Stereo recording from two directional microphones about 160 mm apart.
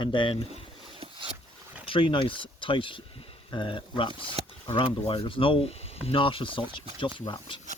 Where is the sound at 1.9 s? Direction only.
30° left (ahead or behind).